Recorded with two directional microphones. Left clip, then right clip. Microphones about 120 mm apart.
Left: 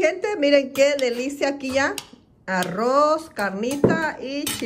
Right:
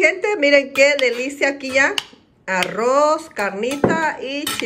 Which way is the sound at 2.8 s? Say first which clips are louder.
Right 2 dB; 40° right (ahead or behind).